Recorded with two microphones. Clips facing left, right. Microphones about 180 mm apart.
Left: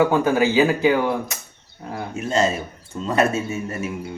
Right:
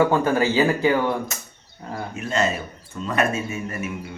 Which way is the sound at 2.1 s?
35° left (ahead or behind).